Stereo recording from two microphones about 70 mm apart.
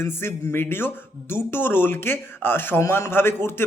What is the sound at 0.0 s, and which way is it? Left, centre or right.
A man's voice, left.